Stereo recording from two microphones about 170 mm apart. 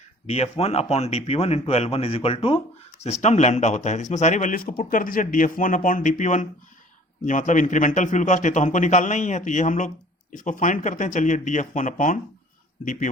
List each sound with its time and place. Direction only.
0.3 s speech: 35° left (ahead or behind)